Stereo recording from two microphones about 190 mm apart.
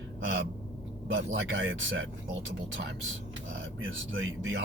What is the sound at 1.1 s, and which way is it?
Speech, 80° right.